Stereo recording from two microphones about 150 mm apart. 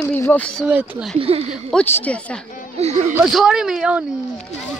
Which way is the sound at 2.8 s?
45° right (ahead or behind).